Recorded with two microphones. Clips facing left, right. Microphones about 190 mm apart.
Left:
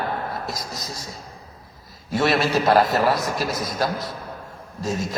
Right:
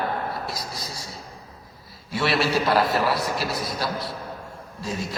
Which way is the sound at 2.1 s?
45° left (ahead or behind).